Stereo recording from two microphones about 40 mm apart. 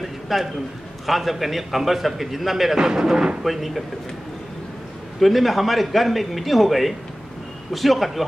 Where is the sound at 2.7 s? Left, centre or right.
Centre.